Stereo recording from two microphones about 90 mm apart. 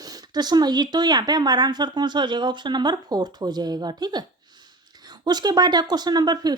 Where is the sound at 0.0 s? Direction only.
45° right (ahead or behind).